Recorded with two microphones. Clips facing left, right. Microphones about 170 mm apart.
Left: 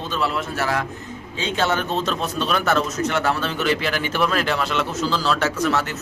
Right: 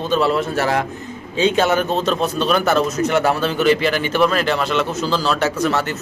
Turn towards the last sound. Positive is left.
turn(degrees=0)  # may be behind; listen again after turning